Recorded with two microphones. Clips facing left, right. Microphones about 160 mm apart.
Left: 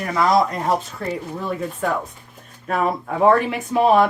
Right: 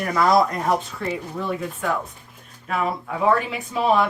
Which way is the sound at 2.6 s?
45° left (ahead or behind).